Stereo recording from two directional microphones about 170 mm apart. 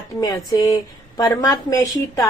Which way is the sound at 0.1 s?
20° left (ahead or behind).